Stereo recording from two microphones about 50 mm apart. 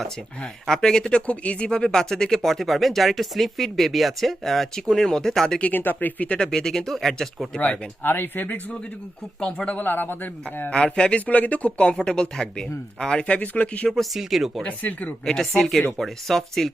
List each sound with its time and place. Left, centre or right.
0.7 s speech: centre
5.7 s speech: left
6.3 s speech: centre
8.0 s speech: left
9.4 s speech: left
9.7 s speech: left
10.8 s speech: centre
11.3 s speech: left
11.9 s speech: centre
13.2 s speech: left
13.9 s speech: centre
14.7 s speech: left
15.2 s speech: centre